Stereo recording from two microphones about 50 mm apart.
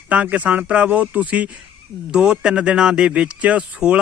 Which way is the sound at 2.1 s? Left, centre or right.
Centre.